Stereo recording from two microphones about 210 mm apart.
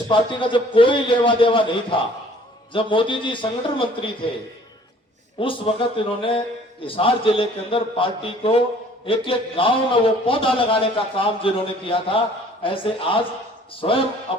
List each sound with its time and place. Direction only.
0.1 s a man's voice: 25° left (ahead or behind)
5.4 s a man's voice: 25° left (ahead or behind)